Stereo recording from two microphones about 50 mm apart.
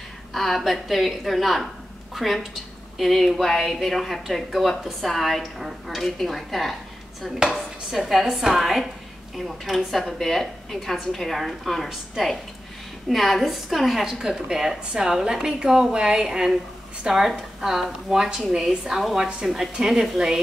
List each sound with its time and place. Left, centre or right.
0.3 s a woman's voice: centre
7.3 s chopping: centre
8.1 s a woman's voice: centre
17.6 s a woman's voice: centre